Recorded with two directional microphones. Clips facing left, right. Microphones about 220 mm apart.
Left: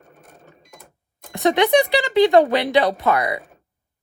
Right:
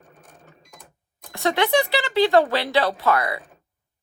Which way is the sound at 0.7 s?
Centre (ahead or behind).